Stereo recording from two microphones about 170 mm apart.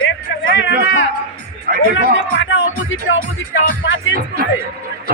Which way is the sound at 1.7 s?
65° right (ahead or behind).